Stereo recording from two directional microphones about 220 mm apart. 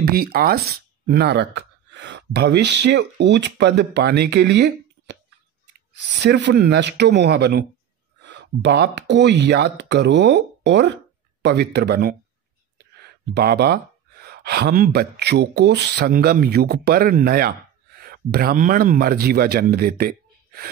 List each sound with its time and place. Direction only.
0.0 s speech: 45° right (ahead or behind)
6.2 s speech: 50° right (ahead or behind)
13.3 s speech: 45° right (ahead or behind)